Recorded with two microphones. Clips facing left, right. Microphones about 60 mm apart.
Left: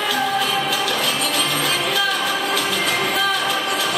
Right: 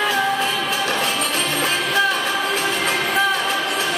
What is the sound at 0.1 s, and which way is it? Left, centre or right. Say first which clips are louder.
Music: even; right.